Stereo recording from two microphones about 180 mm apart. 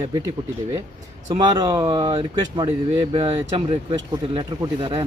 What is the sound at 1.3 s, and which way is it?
Speech, 25° right (ahead or behind).